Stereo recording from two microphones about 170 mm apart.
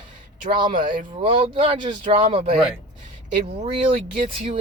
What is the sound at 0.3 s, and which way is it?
Speech, 50° right (ahead or behind).